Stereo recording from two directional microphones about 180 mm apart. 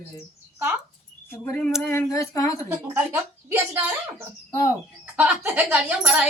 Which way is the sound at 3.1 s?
10° right (ahead or behind).